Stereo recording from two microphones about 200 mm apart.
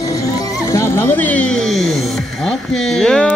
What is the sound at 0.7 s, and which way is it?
Music, 15° left (ahead or behind).